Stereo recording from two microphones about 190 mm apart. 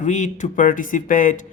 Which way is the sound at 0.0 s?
40° left (ahead or behind).